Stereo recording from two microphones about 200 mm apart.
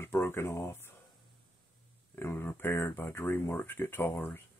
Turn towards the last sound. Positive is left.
turn(degrees=10)  # may be behind; listen again after turning